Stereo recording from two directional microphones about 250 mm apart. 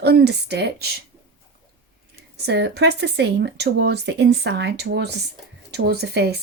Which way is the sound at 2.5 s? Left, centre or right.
Right.